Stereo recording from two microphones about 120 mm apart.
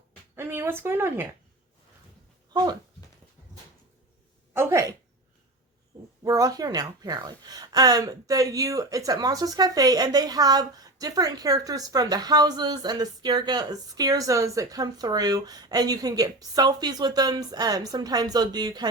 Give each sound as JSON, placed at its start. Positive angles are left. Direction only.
{"t": 0.3, "sound": "speech", "side_deg": -20}
{"t": 2.5, "sound": "speech", "side_deg": -35}
{"t": 4.5, "sound": "speech", "side_deg": -20}
{"t": 6.2, "sound": "a woman's voice", "side_deg": -30}